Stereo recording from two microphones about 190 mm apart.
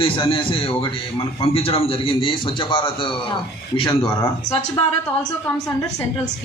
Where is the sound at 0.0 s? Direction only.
25° left (ahead or behind).